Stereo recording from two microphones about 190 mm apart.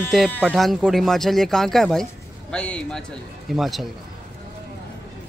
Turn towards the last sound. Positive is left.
turn(degrees=0)  # may be behind; listen again after turning